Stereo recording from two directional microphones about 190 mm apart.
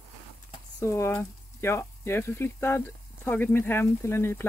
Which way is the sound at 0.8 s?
15° left (ahead or behind).